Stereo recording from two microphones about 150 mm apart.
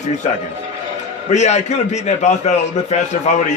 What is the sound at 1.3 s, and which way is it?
A man's voice, 50° left (ahead or behind).